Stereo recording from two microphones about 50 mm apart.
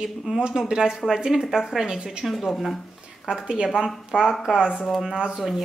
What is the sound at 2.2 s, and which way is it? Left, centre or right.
Speech, centre.